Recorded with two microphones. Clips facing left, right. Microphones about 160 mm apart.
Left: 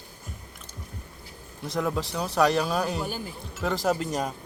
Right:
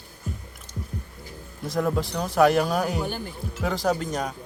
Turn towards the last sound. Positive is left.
turn(degrees=5)  # may be behind; listen again after turning